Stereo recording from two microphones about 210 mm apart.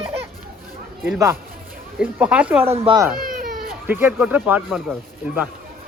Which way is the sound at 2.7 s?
25° right (ahead or behind).